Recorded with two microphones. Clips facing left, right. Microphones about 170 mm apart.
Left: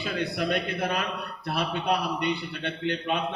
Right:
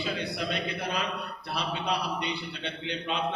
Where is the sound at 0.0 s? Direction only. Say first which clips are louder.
Left 3 dB; 55° left (ahead or behind).